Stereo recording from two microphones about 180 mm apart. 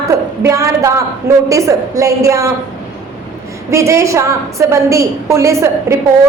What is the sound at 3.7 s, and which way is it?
A woman's voice, 15° right (ahead or behind).